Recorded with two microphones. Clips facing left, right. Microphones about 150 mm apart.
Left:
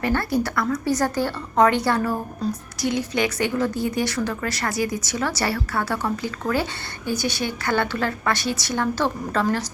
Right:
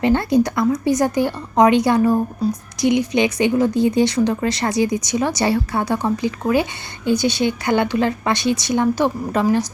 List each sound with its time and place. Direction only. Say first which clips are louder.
0.0 s a woman's voice: right 6 dB; 20° right (ahead or behind)